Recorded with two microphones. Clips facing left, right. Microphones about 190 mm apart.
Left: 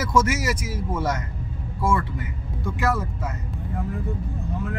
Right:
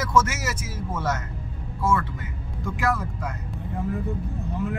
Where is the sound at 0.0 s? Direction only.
10° left (ahead or behind).